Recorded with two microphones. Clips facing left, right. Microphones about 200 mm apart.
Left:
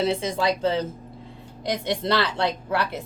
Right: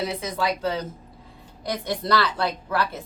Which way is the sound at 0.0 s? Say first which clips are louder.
Left 4 dB; 30° left (ahead or behind).